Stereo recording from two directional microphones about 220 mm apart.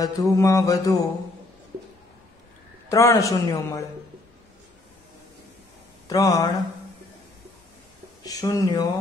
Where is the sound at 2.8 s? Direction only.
15° left (ahead or behind).